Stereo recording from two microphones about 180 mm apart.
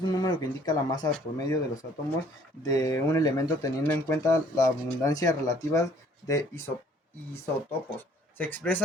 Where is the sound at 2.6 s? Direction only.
15° left (ahead or behind).